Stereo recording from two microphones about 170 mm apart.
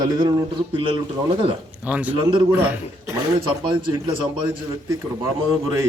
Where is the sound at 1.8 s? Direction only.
10° right (ahead or behind).